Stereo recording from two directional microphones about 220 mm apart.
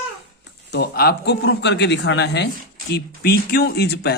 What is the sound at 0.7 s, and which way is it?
Speech, 45° left (ahead or behind).